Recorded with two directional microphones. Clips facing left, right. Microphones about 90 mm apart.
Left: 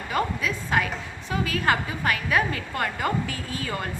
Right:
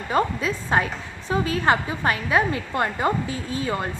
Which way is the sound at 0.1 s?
30° right (ahead or behind).